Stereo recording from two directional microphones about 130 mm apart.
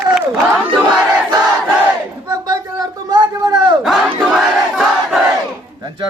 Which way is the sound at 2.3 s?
30° right (ahead or behind).